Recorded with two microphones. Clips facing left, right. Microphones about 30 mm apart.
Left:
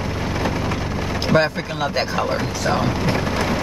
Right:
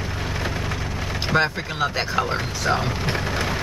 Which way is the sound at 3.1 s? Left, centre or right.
Centre.